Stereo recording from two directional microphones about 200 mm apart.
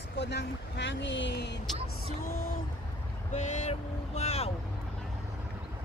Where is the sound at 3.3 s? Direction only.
35° left (ahead or behind).